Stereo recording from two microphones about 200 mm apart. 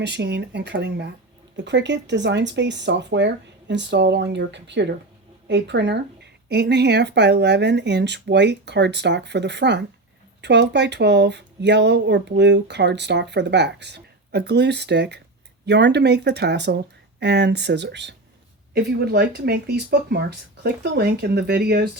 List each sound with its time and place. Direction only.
0.0 s speech: 60° right (ahead or behind)